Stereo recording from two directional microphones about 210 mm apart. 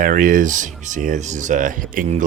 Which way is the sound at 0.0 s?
40° right (ahead or behind).